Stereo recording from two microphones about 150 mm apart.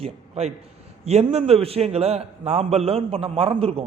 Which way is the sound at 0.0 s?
45° right (ahead or behind).